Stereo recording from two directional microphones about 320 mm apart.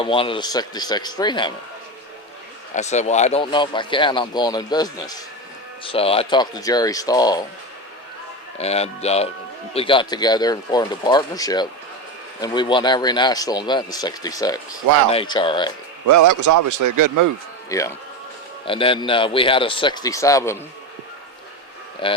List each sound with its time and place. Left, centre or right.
0.0 s speech: centre
2.7 s speech: left
8.5 s speech: centre
16.0 s a man's voice: right
17.7 s speech: centre
22.0 s speech: centre